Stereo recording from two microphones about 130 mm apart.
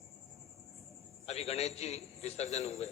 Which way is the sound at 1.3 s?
55° left (ahead or behind).